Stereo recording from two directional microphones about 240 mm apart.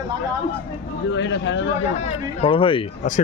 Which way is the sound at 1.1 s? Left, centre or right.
Left.